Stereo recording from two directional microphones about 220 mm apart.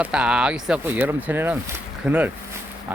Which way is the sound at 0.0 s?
5° right (ahead or behind).